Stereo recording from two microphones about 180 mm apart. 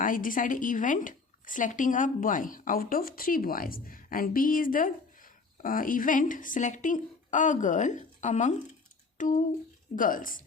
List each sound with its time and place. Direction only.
0.0 s speech: 50° left (ahead or behind)